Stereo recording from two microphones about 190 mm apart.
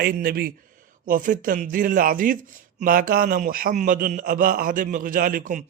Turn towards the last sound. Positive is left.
turn(degrees=-45)  # may be behind; listen again after turning